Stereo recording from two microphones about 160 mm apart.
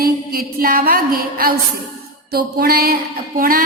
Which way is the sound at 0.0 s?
70° right (ahead or behind).